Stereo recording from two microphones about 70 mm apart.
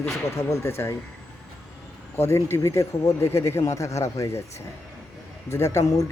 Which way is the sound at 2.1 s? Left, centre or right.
Left.